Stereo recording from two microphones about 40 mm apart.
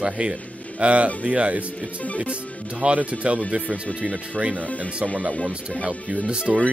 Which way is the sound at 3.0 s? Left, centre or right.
Right.